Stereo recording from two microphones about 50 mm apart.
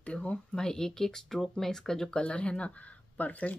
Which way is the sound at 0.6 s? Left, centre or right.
Centre.